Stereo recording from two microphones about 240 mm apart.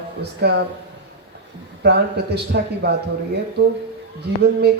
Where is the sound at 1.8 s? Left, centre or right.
Right.